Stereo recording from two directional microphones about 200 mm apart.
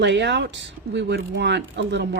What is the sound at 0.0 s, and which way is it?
Speech, 60° right (ahead or behind).